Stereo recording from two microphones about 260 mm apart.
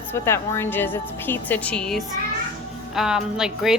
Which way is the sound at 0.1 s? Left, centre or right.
Centre.